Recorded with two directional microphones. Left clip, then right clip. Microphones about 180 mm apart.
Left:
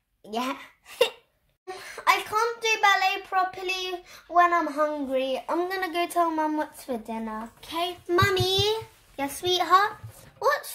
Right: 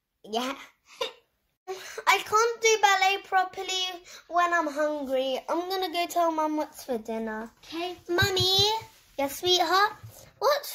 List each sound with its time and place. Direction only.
0.3 s speech: 35° right (ahead or behind)
1.7 s a child's voice: 40° right (ahead or behind)